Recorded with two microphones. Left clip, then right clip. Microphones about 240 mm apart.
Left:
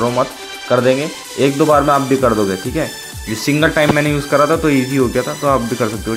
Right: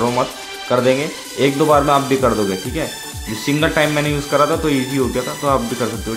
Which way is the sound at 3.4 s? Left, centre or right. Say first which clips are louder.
Left 3 dB; centre.